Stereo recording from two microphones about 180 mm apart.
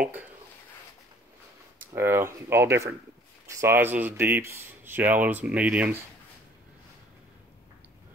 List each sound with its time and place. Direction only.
1.8 s speech: 15° right (ahead or behind)